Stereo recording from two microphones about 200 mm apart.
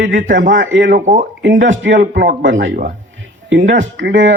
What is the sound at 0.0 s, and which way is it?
Speech, 65° right (ahead or behind).